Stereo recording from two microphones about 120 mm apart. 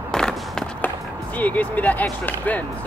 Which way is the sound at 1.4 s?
15° left (ahead or behind).